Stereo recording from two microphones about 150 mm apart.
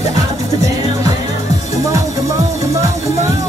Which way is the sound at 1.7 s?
20° right (ahead or behind).